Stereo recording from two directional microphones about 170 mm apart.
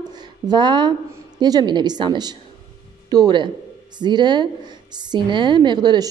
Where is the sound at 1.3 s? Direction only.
25° right (ahead or behind).